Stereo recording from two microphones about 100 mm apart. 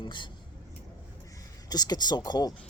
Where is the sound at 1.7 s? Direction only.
40° left (ahead or behind).